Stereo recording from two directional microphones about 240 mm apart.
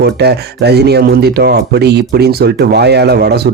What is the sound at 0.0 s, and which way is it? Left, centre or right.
Speech, right.